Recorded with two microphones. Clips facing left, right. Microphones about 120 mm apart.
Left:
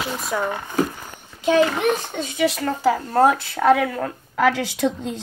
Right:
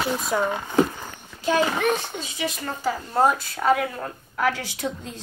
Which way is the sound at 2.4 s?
90° left.